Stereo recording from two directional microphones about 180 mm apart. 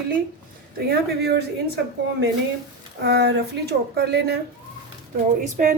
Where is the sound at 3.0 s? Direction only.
65° right (ahead or behind).